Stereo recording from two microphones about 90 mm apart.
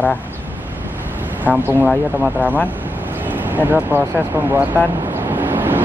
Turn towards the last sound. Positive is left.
turn(degrees=-20)  # may be behind; listen again after turning